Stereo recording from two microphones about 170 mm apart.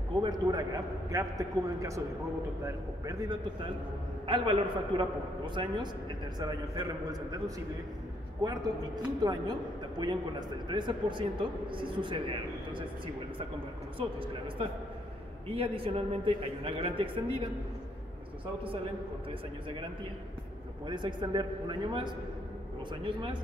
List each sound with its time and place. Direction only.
0.2 s a man's voice: 25° right (ahead or behind)
4.3 s a man's voice: 30° right (ahead or behind)
8.4 s a man's voice: 20° right (ahead or behind)
20.8 s a man's voice: 25° right (ahead or behind)